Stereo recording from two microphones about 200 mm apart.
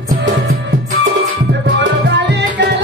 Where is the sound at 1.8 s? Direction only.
60° right (ahead or behind).